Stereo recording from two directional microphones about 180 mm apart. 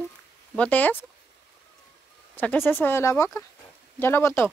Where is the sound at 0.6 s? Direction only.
10° left (ahead or behind).